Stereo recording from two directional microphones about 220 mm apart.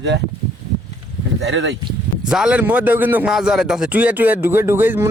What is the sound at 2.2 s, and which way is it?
A man's voice, 5° right (ahead or behind).